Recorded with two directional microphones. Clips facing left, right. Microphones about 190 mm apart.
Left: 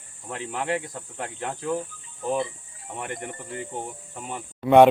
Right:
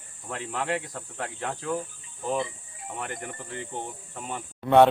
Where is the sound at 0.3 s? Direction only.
15° left (ahead or behind).